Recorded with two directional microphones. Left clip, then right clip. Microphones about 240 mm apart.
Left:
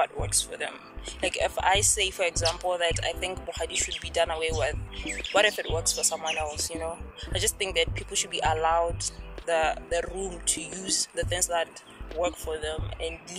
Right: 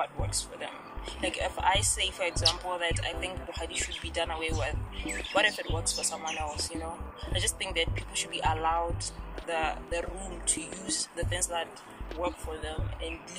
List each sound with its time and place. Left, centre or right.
0.0 s speech: left